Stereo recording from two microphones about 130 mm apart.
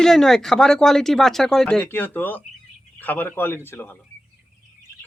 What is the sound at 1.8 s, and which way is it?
Speech, 15° left (ahead or behind).